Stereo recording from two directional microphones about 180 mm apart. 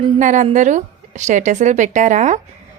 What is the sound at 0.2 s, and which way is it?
A woman's voice, 45° right (ahead or behind).